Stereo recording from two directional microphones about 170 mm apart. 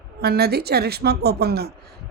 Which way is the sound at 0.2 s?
65° right (ahead or behind).